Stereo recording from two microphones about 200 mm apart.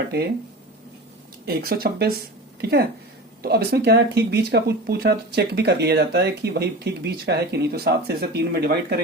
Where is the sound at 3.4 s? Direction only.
55° right (ahead or behind).